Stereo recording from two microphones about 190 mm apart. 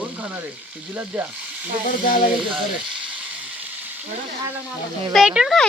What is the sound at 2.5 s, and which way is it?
Speech, 5° right (ahead or behind).